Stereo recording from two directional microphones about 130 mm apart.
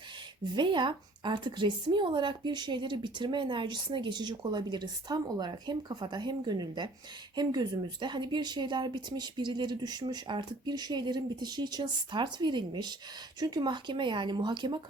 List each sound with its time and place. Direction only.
0.5 s a woman's voice: 35° right (ahead or behind)